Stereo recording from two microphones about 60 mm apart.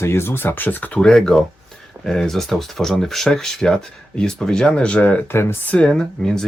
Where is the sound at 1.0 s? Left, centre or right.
Centre.